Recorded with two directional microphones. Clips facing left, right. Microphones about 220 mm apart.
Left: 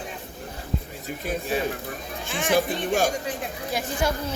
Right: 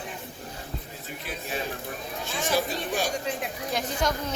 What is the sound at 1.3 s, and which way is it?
Speech, 45° left (ahead or behind).